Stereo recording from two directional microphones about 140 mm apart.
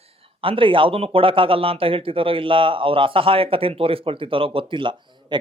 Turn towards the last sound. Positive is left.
turn(degrees=-35)  # may be behind; listen again after turning